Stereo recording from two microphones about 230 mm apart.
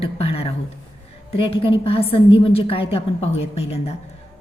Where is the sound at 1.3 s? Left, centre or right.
Left.